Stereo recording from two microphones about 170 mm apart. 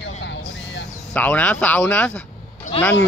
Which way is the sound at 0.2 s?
90° left.